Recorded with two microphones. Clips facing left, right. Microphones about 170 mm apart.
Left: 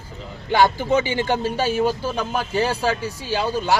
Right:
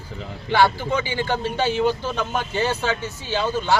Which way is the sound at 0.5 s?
15° left (ahead or behind).